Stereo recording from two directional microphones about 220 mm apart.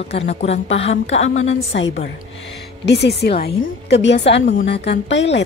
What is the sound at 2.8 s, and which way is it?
A woman's voice, 50° left (ahead or behind).